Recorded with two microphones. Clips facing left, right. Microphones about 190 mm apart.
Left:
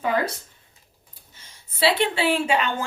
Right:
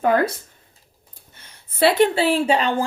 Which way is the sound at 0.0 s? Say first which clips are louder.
Right 5 dB; 50° right (ahead or behind).